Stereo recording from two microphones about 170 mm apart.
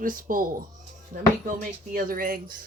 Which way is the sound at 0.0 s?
55° right (ahead or behind).